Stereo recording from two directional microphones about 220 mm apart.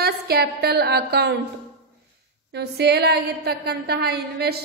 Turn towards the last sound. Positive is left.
turn(degrees=-45)  # may be behind; listen again after turning